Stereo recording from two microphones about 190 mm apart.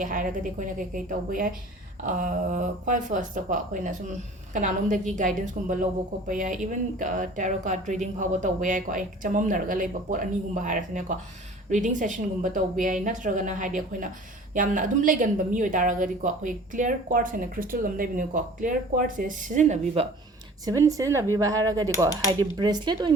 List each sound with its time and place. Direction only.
0.0 s a woman's voice: 45° right (ahead or behind)
20.7 s speech: 15° right (ahead or behind)
22.3 s cutlery: 20° right (ahead or behind)